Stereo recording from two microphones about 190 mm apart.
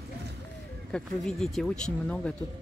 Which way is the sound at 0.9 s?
Centre (ahead or behind).